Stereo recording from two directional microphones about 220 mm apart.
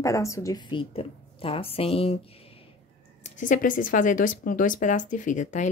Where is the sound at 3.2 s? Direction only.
35° left (ahead or behind).